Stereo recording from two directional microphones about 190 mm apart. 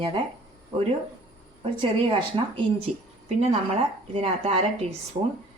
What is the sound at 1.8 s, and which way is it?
Speech, 30° right (ahead or behind).